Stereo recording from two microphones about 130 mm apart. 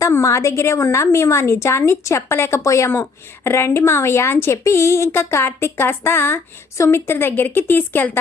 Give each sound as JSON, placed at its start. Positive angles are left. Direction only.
{"t": 0.0, "sound": "a woman's voice", "side_deg": 25}